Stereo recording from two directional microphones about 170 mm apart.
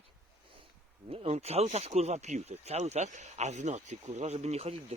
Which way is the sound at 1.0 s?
35° right (ahead or behind).